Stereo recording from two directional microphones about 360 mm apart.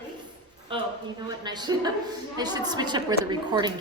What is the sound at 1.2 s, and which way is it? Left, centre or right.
A woman's voice, centre.